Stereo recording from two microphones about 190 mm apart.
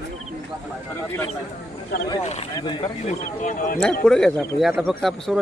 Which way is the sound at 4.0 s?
5° left (ahead or behind).